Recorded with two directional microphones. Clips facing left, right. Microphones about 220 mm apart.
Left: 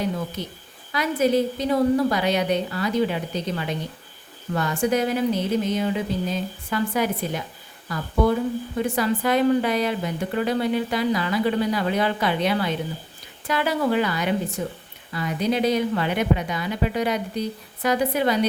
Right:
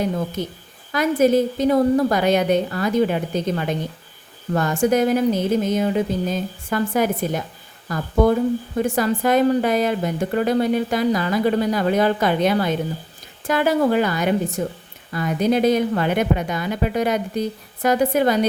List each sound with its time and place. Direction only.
0.4 s a woman's voice: 50° right (ahead or behind)